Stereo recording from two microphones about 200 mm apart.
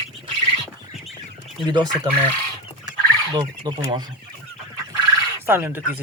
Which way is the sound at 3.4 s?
20° right (ahead or behind).